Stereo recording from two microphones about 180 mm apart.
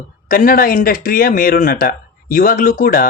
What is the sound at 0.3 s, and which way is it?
Speech, 50° left (ahead or behind).